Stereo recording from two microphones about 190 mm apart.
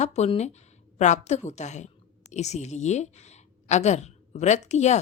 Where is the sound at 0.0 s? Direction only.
35° left (ahead or behind).